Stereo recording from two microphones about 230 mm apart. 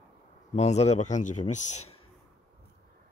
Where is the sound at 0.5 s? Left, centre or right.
Left.